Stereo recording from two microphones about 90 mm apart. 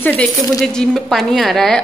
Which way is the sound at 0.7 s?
5° left (ahead or behind).